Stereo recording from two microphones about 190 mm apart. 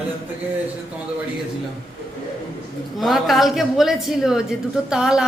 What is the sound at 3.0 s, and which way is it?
A woman's voice, centre (ahead or behind).